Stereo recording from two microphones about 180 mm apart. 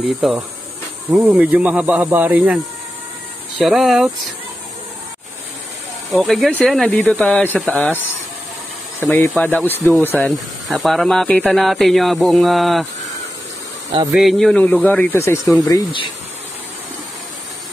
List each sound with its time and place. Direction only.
0.2 s speech: centre (ahead or behind)
6.1 s speech: centre (ahead or behind)
9.0 s speech: 10° left (ahead or behind)
14.1 s speech: centre (ahead or behind); by 16.1 s 25° left (ahead or behind)